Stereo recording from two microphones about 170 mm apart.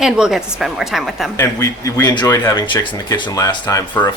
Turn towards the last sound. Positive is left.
turn(degrees=20)  # may be behind; listen again after turning